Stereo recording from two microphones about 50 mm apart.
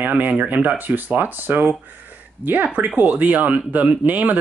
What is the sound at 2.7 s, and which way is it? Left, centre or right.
Speech, right.